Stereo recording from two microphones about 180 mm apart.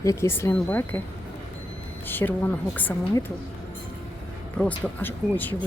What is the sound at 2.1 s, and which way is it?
Speech, 10° left (ahead or behind).